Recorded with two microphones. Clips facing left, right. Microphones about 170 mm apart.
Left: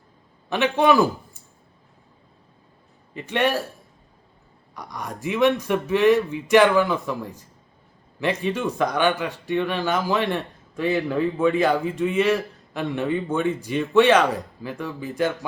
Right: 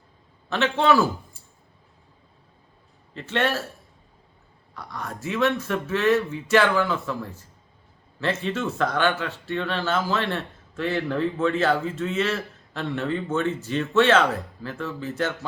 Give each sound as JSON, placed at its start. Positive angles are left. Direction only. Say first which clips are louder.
{"t": 0.5, "sound": "speech", "louder": "left 2 dB", "side_deg": 15}
{"t": 3.2, "sound": "speech", "louder": "left 2 dB", "side_deg": 15}
{"t": 4.7, "sound": "speech", "louder": "left 1 dB", "side_deg": 15}